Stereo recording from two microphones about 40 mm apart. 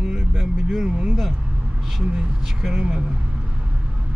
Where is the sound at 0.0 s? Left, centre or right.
Centre.